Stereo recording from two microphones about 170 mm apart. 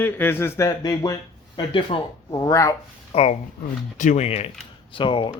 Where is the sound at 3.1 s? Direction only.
40° left (ahead or behind).